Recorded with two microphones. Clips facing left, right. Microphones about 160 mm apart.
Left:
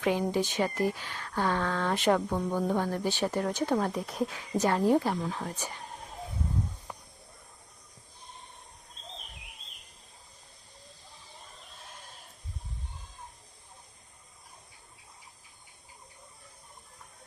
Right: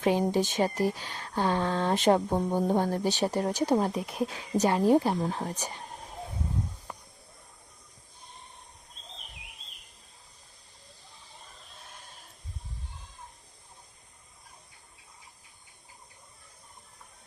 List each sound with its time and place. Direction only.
0.0 s speech: 35° right (ahead or behind)
3.8 s speech: 25° right (ahead or behind)
5.2 s speech: 35° right (ahead or behind)